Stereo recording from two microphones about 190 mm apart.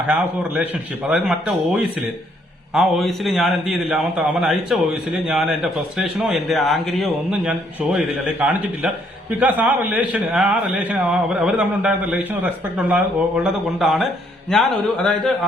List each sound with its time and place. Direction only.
0.1 s a man's voice: 10° right (ahead or behind)